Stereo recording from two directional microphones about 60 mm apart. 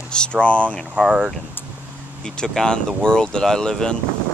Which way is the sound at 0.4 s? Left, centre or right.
Centre.